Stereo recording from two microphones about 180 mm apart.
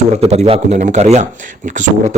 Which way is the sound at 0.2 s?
35° right (ahead or behind).